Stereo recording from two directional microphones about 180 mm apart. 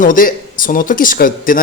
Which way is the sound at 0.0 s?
50° left (ahead or behind).